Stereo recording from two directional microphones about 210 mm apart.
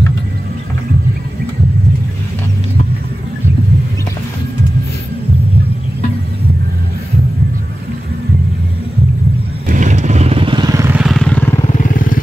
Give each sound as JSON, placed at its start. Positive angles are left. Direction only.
{"t": 9.7, "sound": "vehicle", "side_deg": -35}
{"t": 11.0, "sound": "vehicle", "side_deg": 0}
{"t": 11.9, "sound": "vehicle", "side_deg": 40}